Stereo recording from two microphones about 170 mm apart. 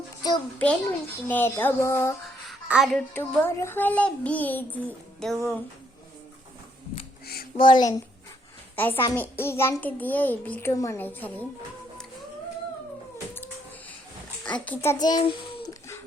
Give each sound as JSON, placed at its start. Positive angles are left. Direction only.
{"t": 0.2, "sound": "a child's voice", "side_deg": 20}
{"t": 0.6, "sound": "child singing", "side_deg": 10}
{"t": 2.5, "sound": "a sound", "side_deg": -5}
{"t": 2.9, "sound": "child singing", "side_deg": 15}
{"t": 7.5, "sound": "a child's voice", "side_deg": 30}
{"t": 8.7, "sound": "a woman's voice", "side_deg": 10}
{"t": 9.1, "sound": "child singing", "side_deg": 10}
{"t": 14.4, "sound": "a child's voice", "side_deg": 10}